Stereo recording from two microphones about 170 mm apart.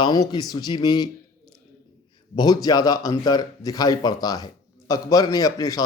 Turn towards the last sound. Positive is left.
turn(degrees=20)  # may be behind; listen again after turning